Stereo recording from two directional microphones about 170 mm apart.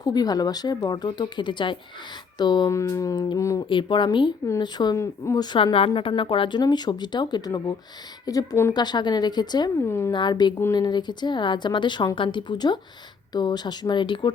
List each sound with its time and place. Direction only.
0.0 s a woman's voice: 25° left (ahead or behind)
5.5 s a woman's voice: 30° left (ahead or behind); by 10.1 s 15° left (ahead or behind)
10.1 s a woman's voice: 25° left (ahead or behind)